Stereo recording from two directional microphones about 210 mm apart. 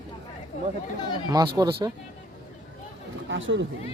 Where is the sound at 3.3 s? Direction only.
60° right (ahead or behind).